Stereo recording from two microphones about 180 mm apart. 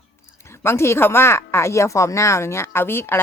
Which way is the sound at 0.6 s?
15° left (ahead or behind).